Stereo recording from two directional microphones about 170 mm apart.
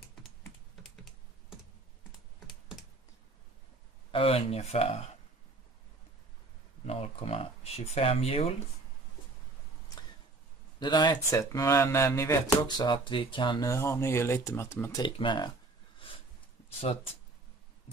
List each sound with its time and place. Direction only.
4.1 s speech: 35° left (ahead or behind)
6.9 s speech: 35° left (ahead or behind)
10.8 s speech: 25° left (ahead or behind)
13.7 s speech: 15° left (ahead or behind)
15.0 s speech: 30° left (ahead or behind)